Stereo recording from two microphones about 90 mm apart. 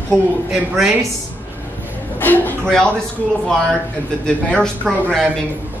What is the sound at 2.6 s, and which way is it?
Speech, 5° left (ahead or behind).